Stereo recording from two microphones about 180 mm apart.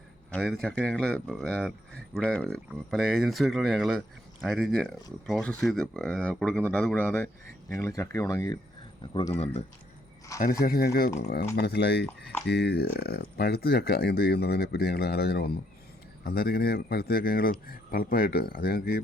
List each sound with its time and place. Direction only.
0.3 s speech: 5° left (ahead or behind); by 8.5 s 20° left (ahead or behind)
9.4 s speech: 35° left (ahead or behind)
10.6 s speech: 60° left (ahead or behind)